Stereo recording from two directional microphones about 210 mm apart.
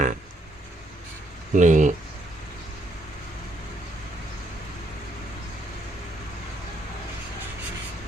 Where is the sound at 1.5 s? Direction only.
35° right (ahead or behind).